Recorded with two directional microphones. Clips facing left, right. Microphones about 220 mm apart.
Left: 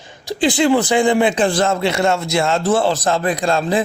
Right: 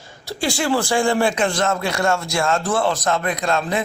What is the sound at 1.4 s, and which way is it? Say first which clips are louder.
A man's voice: left 4 dB; 30° left (ahead or behind).